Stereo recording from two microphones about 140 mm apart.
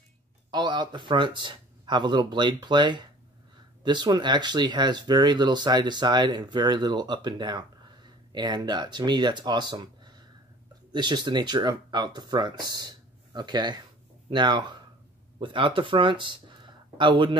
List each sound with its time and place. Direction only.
0.5 s speech: 30° right (ahead or behind)